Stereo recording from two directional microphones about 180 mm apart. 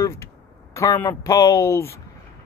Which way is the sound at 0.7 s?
15° left (ahead or behind).